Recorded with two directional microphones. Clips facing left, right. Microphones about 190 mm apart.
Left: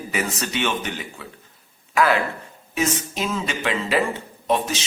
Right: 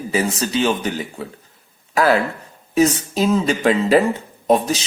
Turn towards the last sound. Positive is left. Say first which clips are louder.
# right 6 dB
turn(degrees=-40)  # may be behind; listen again after turning